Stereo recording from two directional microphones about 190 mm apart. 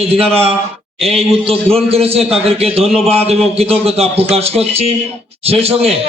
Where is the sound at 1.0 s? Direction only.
30° right (ahead or behind).